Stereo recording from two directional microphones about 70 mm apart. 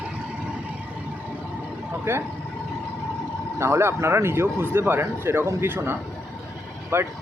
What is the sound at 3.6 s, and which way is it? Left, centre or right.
Speech, right.